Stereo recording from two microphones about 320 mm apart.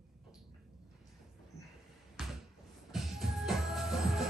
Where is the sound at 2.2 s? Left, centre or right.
Centre.